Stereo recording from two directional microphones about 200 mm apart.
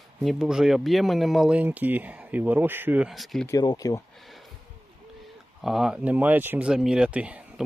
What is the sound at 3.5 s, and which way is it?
Speech, 20° left (ahead or behind).